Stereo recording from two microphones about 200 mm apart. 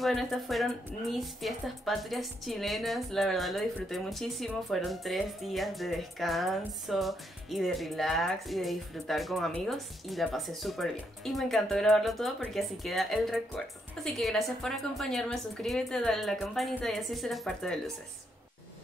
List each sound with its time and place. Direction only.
0.0 s a woman's voice: centre (ahead or behind)